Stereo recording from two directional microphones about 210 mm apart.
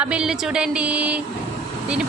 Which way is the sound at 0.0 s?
5° right (ahead or behind).